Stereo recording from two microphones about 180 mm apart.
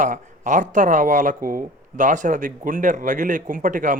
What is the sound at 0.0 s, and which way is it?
A man's voice, 45° right (ahead or behind).